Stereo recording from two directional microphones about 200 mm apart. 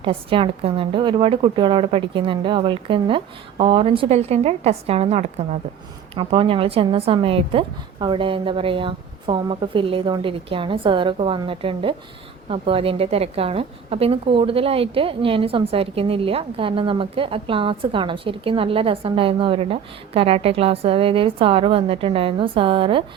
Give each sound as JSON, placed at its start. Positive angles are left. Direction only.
{"t": 0.0, "sound": "a woman's voice", "side_deg": -25}